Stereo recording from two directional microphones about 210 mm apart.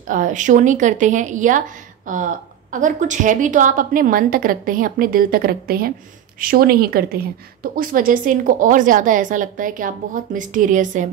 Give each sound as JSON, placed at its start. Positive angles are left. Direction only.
{"t": 0.0, "sound": "a woman's voice", "side_deg": -40}